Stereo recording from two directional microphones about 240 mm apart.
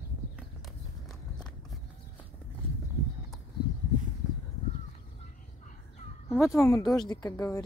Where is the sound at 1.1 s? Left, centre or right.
Centre.